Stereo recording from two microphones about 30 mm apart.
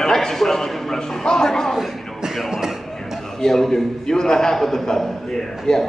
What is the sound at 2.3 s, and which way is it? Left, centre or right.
Music, centre.